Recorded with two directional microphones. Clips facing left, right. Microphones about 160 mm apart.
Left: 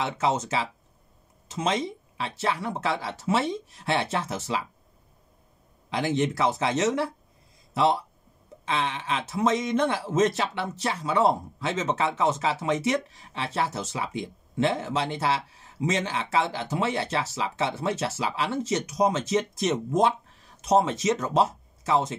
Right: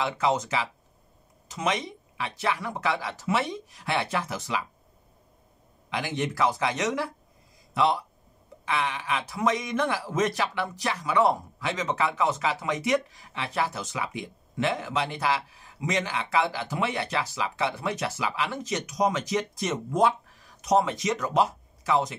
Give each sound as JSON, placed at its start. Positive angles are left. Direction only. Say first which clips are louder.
{"t": 0.0, "sound": "speech", "louder": "even", "side_deg": 25}
{"t": 5.9, "sound": "speech", "louder": "left 3 dB", "side_deg": 25}